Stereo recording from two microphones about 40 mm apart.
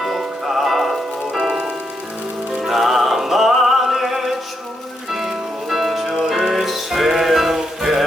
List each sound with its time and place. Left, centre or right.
0.0 s music: centre
6.1 s music: centre